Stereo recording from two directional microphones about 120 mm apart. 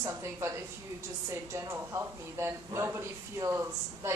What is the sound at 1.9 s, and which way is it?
A man's voice, 25° right (ahead or behind).